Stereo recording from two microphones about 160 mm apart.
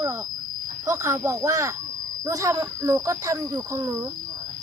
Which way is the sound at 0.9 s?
15° right (ahead or behind).